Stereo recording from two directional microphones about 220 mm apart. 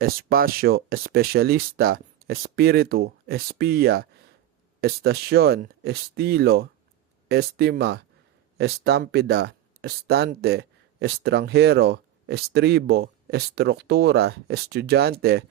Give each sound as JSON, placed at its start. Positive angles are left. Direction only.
{"t": 0.0, "sound": "speech", "side_deg": -40}